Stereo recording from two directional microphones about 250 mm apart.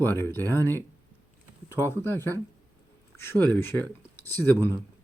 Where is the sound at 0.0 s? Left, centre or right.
Centre.